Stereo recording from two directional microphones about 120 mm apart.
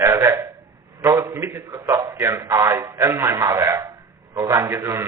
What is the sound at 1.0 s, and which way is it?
A man's voice, 25° right (ahead or behind).